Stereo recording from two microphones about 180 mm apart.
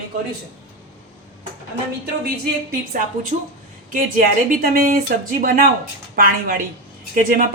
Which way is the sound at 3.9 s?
50° right (ahead or behind).